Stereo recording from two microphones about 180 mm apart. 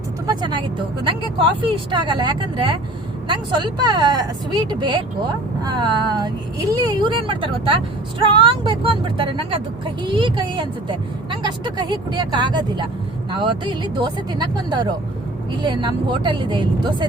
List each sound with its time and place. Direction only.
1.0 s speech: 30° right (ahead or behind)